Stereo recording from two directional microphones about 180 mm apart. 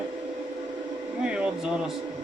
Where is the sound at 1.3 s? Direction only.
5° right (ahead or behind).